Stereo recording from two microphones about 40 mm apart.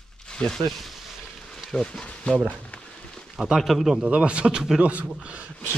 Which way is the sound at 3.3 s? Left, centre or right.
Centre.